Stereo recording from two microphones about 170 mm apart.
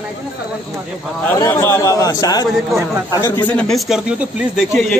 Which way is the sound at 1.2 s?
15° left (ahead or behind).